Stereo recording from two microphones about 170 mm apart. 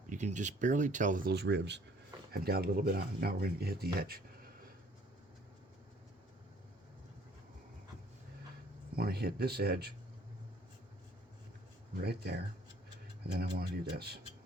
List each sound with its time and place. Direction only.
0.1 s speech: 45° right (ahead or behind)
1.3 s speech: 90° right
2.3 s speech: 65° right (ahead or behind)
9.0 s speech: 70° right (ahead or behind)
12.0 s speech: 70° right (ahead or behind)
13.6 s speech: 65° right (ahead or behind)